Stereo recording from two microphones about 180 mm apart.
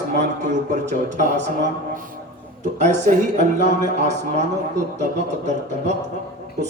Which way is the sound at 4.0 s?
40° right (ahead or behind).